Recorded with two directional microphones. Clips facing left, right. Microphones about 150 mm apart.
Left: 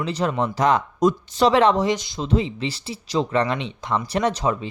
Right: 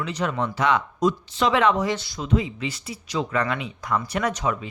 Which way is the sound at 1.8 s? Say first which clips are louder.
Left 3 dB; 20° left (ahead or behind).